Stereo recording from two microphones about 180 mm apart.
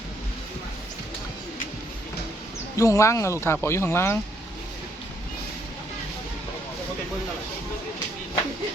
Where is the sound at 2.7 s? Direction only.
15° left (ahead or behind).